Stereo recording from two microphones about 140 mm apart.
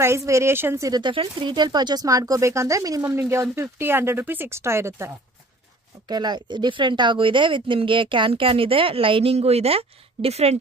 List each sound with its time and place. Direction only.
0.0 s speech: 20° right (ahead or behind)
6.0 s speech: 30° right (ahead or behind); by 10.6 s 50° right (ahead or behind)